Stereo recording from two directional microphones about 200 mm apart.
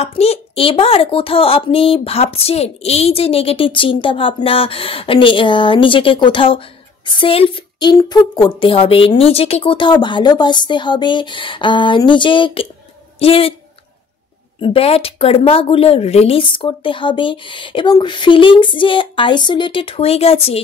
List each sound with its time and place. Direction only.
0.0 s a woman's voice: 30° left (ahead or behind)
14.6 s a woman's voice: 30° left (ahead or behind)